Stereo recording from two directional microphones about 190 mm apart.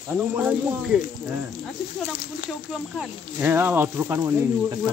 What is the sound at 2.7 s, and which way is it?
Speech, 5° right (ahead or behind).